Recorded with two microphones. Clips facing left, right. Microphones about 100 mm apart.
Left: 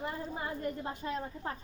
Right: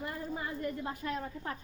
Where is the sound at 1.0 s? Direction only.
25° left (ahead or behind).